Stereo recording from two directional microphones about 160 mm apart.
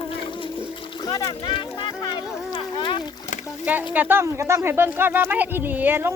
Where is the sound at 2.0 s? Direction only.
30° left (ahead or behind).